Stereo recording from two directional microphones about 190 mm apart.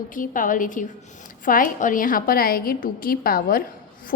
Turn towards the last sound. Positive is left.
turn(degrees=50)  # may be behind; listen again after turning